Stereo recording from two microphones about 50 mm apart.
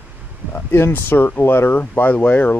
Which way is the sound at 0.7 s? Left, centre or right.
Left.